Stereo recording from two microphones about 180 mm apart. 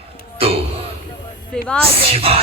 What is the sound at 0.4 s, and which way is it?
Speech, 30° right (ahead or behind).